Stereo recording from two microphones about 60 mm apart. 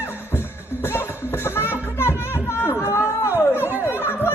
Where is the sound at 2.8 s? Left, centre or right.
Left.